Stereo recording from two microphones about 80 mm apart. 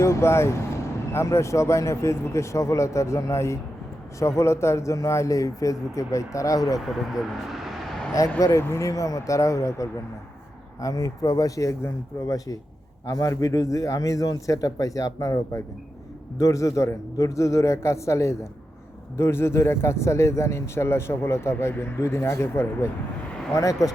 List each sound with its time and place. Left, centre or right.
0.0 s speech: left
6.7 s speech: centre
8.5 s a man's voice: left
13.1 s a man's voice: left
23.6 s a man's voice: left